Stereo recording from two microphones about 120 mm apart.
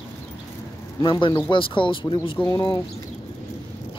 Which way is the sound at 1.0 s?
40° left (ahead or behind).